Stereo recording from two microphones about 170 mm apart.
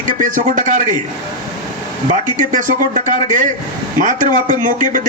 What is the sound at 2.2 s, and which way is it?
Speech, 45° right (ahead or behind).